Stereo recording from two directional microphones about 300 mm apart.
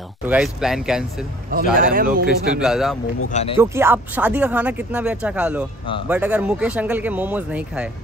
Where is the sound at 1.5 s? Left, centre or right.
Right.